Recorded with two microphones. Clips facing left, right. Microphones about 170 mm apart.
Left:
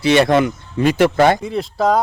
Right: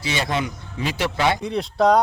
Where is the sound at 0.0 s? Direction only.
65° left (ahead or behind).